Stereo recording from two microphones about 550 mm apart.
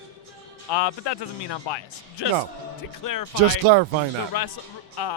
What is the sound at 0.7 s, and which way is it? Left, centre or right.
Speech, left.